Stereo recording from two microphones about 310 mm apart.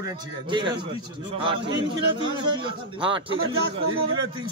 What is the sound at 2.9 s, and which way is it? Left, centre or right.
Speech, centre.